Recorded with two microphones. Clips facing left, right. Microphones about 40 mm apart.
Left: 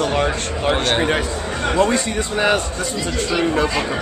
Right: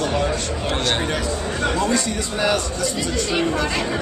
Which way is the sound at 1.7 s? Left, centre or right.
Left.